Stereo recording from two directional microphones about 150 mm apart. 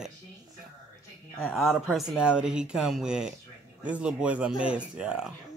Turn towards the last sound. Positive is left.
turn(degrees=-5)  # may be behind; listen again after turning